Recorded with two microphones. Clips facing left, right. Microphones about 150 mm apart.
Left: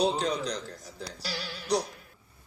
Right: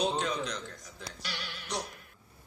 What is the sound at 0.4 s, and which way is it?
Speech, 35° left (ahead or behind).